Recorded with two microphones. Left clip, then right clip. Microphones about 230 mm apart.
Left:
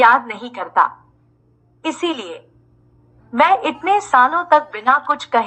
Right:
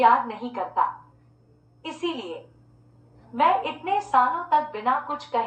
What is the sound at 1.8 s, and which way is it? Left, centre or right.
A woman's voice, left.